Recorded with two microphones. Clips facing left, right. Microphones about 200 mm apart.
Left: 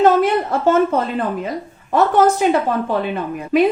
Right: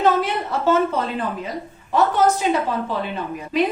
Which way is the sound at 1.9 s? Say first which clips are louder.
Left 4 dB; 55° left (ahead or behind).